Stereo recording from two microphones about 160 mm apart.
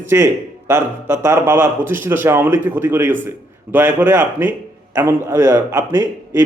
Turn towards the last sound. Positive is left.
turn(degrees=-15)  # may be behind; listen again after turning